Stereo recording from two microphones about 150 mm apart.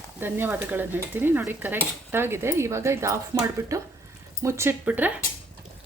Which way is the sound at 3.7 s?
20° right (ahead or behind).